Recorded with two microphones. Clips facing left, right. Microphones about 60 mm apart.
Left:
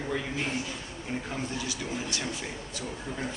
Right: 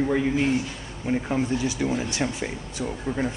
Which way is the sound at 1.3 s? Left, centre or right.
Right.